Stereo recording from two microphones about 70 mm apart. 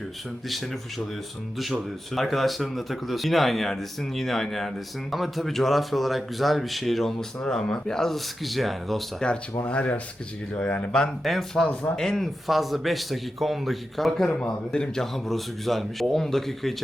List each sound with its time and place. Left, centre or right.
0.4 s speech: centre
2.1 s speech: centre
9.6 s speech: centre
11.2 s speech: centre
11.6 s speech: centre
11.9 s speech: centre